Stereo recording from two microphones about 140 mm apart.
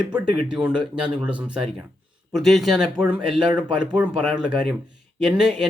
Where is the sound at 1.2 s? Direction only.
10° right (ahead or behind).